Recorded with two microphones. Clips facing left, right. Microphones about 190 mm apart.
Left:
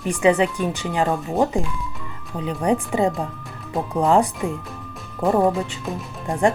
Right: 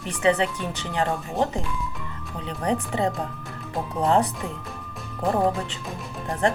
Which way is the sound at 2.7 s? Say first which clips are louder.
Left 3 dB; 10° left (ahead or behind).